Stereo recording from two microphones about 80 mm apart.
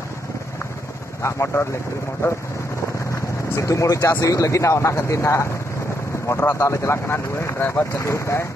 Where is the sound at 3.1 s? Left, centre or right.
Left.